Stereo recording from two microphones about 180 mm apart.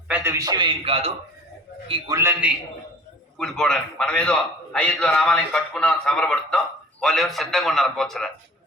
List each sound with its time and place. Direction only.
0.1 s a man's voice: 15° right (ahead or behind); by 1.1 s 30° right (ahead or behind)
1.9 s a man's voice: 20° right (ahead or behind)
3.3 s a man's voice: 5° left (ahead or behind)